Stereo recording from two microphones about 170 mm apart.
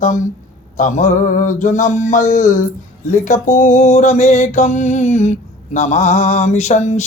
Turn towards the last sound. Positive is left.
turn(degrees=40)  # may be behind; listen again after turning